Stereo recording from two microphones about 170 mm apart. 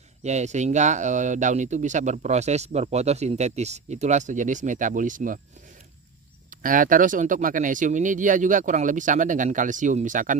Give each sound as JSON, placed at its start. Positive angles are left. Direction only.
{"t": 0.2, "sound": "speech", "side_deg": -40}
{"t": 6.5, "sound": "speech", "side_deg": -55}